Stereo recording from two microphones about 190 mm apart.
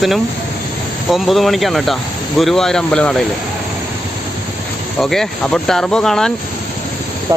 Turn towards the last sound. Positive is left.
turn(degrees=5)  # may be behind; listen again after turning